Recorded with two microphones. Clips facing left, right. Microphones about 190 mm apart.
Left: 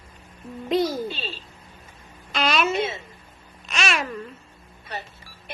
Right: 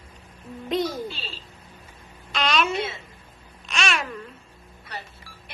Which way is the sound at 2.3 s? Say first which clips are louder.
Left 1 dB; 5° left (ahead or behind).